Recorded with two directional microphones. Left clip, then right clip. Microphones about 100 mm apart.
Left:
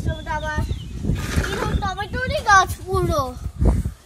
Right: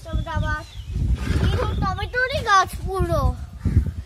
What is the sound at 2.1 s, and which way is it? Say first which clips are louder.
A child's voice: left 2 dB; 5° left (ahead or behind).